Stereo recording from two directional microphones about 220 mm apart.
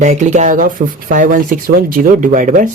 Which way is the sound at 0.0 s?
30° right (ahead or behind).